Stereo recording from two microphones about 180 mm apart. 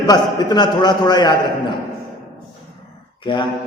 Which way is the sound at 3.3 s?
25° left (ahead or behind).